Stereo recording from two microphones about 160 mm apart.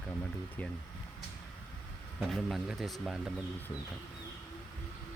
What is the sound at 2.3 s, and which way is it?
Speech, centre (ahead or behind).